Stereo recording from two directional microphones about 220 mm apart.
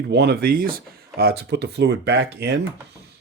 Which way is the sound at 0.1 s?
50° right (ahead or behind).